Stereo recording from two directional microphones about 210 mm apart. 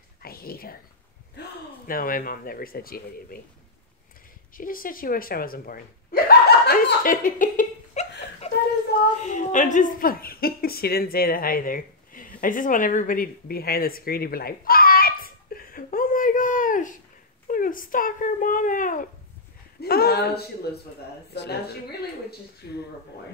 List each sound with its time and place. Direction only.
0.2 s speech: 45° left (ahead or behind)
1.9 s speech: 40° left (ahead or behind)
4.6 s speech: 40° left (ahead or behind)
6.2 s laughter: 45° left (ahead or behind)
9.2 s a woman's voice: 35° left (ahead or behind); by 21.5 s 50° left (ahead or behind)